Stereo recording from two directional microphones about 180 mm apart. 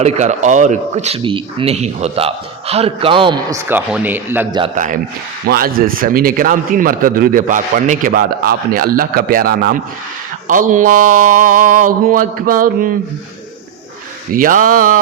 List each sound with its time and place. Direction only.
0.0 s a man's voice: 40° right (ahead or behind)
3.7 s speech: 10° right (ahead or behind)
5.5 s a man's voice: 55° right (ahead or behind)
14.3 s a man's voice: 50° right (ahead or behind)